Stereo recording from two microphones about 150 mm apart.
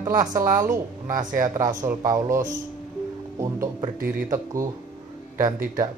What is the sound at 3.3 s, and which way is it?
Speech, 25° right (ahead or behind).